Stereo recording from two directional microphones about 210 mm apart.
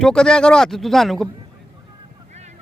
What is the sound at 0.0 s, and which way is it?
Speech, 5° left (ahead or behind).